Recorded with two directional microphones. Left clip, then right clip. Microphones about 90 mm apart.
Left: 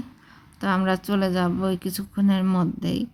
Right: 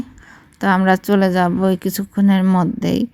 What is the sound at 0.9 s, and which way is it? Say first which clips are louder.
A woman's voice: right 9 dB; 55° right (ahead or behind).